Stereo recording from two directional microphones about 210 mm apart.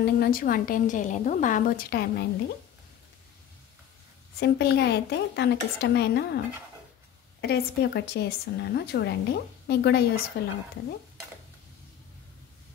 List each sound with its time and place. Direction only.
0.0 s a woman's voice: 45° left (ahead or behind)
4.4 s a woman's voice: 50° left (ahead or behind)
7.4 s a woman's voice: 50° left (ahead or behind)